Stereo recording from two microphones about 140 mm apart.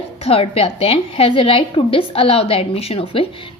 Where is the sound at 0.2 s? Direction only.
45° left (ahead or behind).